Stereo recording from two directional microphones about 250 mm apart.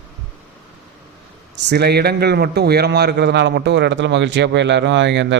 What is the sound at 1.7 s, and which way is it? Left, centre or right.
A man's voice, right.